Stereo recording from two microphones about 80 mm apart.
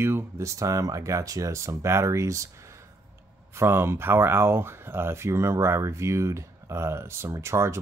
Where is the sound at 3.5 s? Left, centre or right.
Right.